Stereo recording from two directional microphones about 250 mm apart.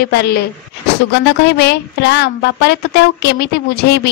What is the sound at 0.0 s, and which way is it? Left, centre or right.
A man's voice, left.